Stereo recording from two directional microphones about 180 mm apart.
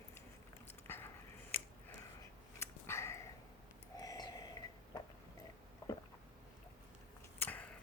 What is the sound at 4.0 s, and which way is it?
Snort, 20° left (ahead or behind).